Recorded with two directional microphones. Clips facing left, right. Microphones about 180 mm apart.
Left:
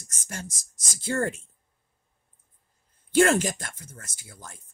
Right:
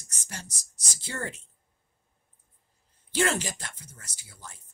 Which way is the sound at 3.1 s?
50° left (ahead or behind).